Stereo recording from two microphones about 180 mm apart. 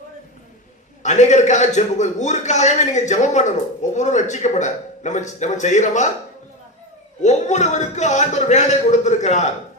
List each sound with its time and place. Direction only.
1.0 s a man's voice: 40° left (ahead or behind)
7.2 s a man's voice: 40° left (ahead or behind)